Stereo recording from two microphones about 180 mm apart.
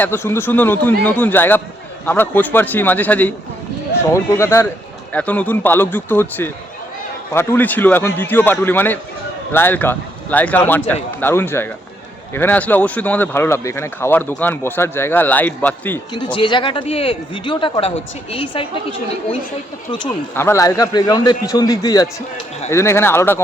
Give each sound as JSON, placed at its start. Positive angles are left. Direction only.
{"t": 0.0, "sound": "speech", "side_deg": 10}
{"t": 16.1, "sound": "speech", "side_deg": 25}
{"t": 20.3, "sound": "speech", "side_deg": 15}